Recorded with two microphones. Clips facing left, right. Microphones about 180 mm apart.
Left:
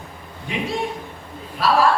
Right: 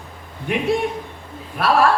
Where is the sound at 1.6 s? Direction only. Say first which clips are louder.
Right 1 dB; 55° right (ahead or behind).